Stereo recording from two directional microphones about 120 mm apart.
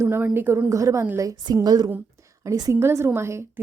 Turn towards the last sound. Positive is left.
turn(degrees=-20)  # may be behind; listen again after turning